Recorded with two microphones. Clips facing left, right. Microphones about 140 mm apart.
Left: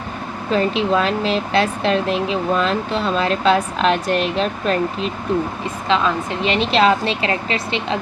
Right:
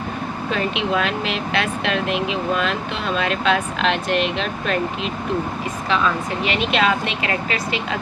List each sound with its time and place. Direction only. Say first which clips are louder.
0.5 s speech: left 5 dB; 35° left (ahead or behind)
6.4 s speech: left 4 dB; 30° left (ahead or behind)